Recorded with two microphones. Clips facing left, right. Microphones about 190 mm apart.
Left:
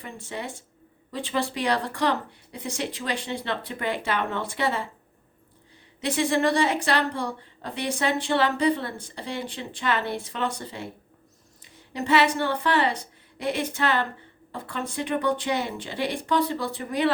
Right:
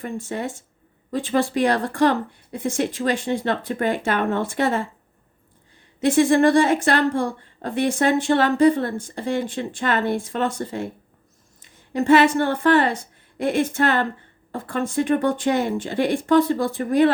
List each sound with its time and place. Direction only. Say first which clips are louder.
0.0 s a woman's voice: right 7 dB; 45° right (ahead or behind)
6.0 s a woman's voice: right 8 dB; 50° right (ahead or behind)